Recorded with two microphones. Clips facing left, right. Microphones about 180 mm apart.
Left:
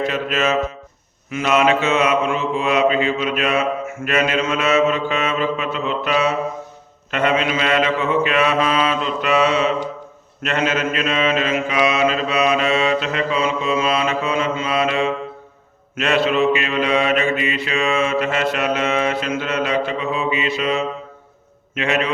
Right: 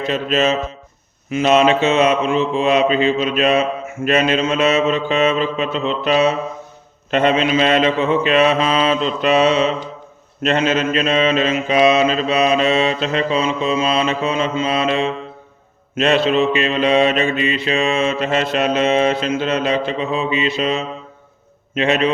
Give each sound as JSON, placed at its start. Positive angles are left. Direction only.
{"t": 0.0, "sound": "mantra", "side_deg": -25}